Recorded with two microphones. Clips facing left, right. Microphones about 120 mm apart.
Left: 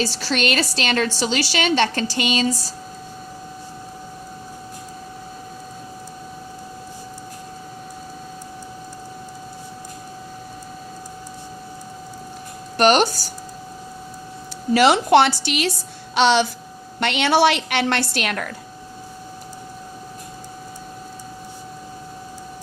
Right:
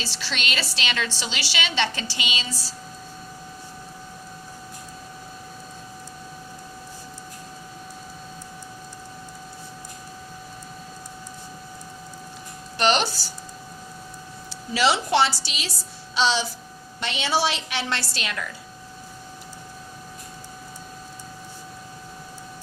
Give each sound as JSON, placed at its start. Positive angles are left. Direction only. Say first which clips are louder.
{"t": 0.0, "sound": "a woman's voice", "louder": "left 10 dB", "side_deg": 45}
{"t": 12.7, "sound": "a sound", "louder": "left 6 dB", "side_deg": 50}
{"t": 14.7, "sound": "a woman's voice", "louder": "left 7 dB", "side_deg": 55}